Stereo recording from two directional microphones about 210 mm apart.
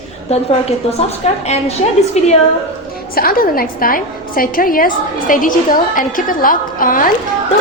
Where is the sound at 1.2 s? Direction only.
30° left (ahead or behind).